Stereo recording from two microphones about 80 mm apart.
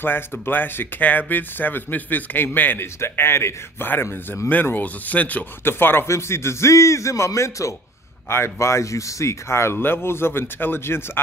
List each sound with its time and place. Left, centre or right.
0.0 s speech: left